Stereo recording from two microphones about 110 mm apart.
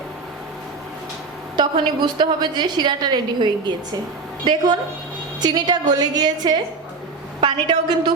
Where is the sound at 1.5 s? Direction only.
40° right (ahead or behind).